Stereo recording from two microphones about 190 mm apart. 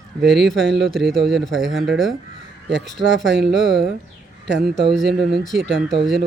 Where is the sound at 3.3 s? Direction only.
65° right (ahead or behind).